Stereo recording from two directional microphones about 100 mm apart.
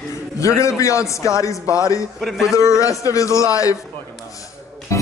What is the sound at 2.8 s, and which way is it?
Speech, 35° left (ahead or behind).